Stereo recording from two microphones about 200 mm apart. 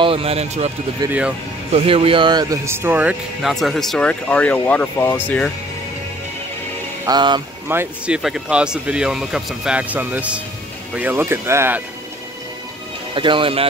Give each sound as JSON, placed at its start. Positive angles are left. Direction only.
{"t": 0.0, "sound": "speech", "side_deg": -30}
{"t": 1.7, "sound": "speech", "side_deg": -30}
{"t": 7.1, "sound": "speech", "side_deg": -20}
{"t": 7.6, "sound": "speech", "side_deg": -10}
{"t": 13.1, "sound": "speech", "side_deg": -25}